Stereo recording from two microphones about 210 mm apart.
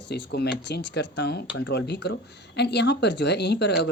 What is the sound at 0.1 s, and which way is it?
Speech, 50° left (ahead or behind).